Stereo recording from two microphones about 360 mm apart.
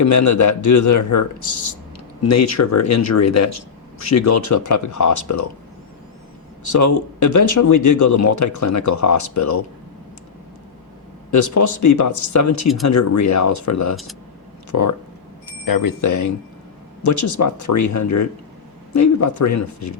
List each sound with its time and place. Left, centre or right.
0.0 s speech: left
6.7 s speech: left
11.3 s speech: left
15.6 s speech: left